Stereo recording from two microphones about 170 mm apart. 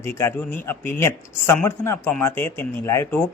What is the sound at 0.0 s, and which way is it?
Speech, 15° left (ahead or behind).